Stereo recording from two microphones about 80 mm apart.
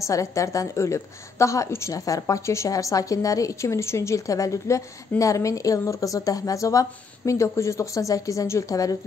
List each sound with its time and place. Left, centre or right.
0.0 s a woman's voice: left